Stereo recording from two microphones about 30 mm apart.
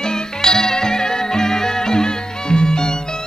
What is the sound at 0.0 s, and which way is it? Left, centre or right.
Music, left.